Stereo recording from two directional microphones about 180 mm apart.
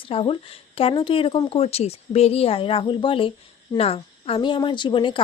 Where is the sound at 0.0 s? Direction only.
30° left (ahead or behind).